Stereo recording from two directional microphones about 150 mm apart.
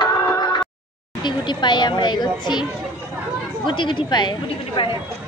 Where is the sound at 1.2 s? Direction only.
30° left (ahead or behind).